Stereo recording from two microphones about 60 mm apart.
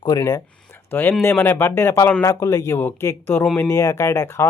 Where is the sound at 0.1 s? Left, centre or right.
Left.